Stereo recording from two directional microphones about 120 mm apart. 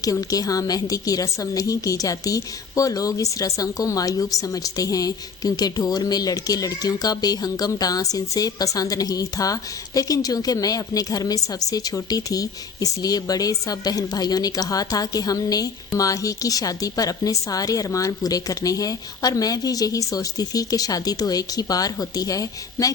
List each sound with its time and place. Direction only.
0.0 s a woman's voice: 30° left (ahead or behind)